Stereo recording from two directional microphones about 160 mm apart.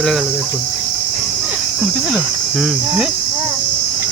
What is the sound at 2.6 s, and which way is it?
Speech, 5° right (ahead or behind).